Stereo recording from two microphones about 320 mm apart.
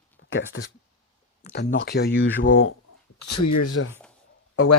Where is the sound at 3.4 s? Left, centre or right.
Left.